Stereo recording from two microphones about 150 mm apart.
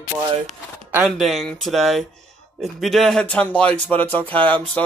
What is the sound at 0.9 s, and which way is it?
Speech, centre (ahead or behind).